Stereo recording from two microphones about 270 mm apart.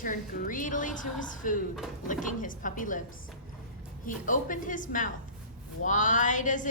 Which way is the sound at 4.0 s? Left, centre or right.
Left.